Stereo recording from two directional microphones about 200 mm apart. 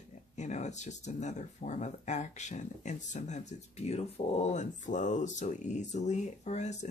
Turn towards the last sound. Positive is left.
turn(degrees=35)  # may be behind; listen again after turning